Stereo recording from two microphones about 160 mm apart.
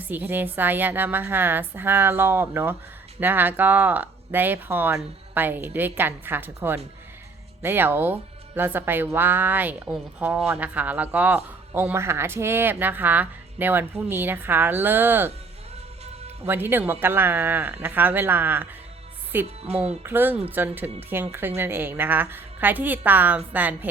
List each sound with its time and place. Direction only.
0.0 s speech: 10° right (ahead or behind)
16.5 s speech: 15° right (ahead or behind)